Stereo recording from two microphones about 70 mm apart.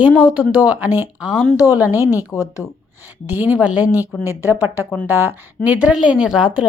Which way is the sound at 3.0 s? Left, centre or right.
Right.